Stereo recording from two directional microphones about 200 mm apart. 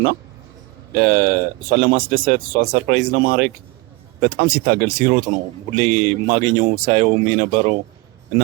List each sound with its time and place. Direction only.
0.9 s speech: 45° right (ahead or behind)